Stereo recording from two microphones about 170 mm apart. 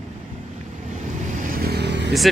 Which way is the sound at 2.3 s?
Centre (ahead or behind).